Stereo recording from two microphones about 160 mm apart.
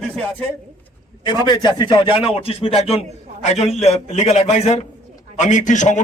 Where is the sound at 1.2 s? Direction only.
25° left (ahead or behind).